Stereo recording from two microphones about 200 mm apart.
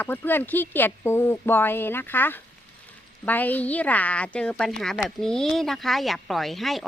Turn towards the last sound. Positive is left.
turn(degrees=0)  # may be behind; listen again after turning